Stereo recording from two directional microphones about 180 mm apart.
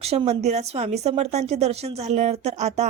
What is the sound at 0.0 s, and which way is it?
Speech, 35° right (ahead or behind).